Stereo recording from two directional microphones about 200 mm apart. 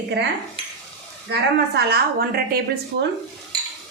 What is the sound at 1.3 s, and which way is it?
A woman's voice, 55° right (ahead or behind).